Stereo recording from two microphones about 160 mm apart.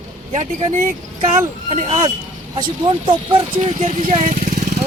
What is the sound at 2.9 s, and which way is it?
Speech, 30° right (ahead or behind).